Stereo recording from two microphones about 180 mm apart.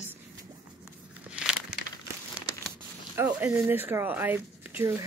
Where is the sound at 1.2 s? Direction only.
5° right (ahead or behind).